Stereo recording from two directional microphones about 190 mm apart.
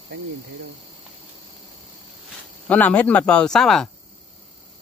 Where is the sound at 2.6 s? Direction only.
10° left (ahead or behind).